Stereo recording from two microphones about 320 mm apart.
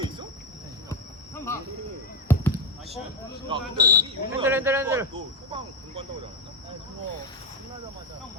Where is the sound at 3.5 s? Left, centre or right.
Centre.